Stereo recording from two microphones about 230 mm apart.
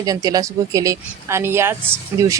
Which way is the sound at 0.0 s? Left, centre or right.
Centre.